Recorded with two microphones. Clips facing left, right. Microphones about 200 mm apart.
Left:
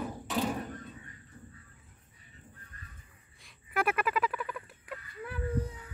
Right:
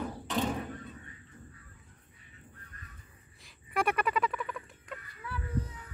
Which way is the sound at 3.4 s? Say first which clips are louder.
Even; centre (ahead or behind).